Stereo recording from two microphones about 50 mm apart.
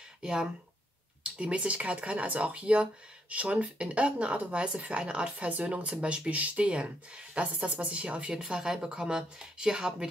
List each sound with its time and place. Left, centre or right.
0.2 s a woman's voice: centre